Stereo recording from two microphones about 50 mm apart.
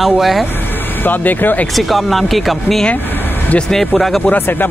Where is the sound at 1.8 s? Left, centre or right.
Centre.